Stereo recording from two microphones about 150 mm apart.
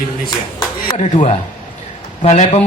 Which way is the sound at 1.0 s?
50° left (ahead or behind).